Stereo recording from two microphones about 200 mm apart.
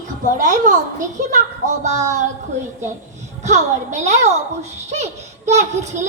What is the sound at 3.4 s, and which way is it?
Speech, 35° right (ahead or behind).